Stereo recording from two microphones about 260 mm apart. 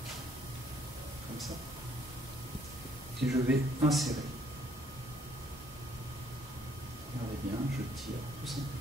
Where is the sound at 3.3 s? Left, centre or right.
Centre.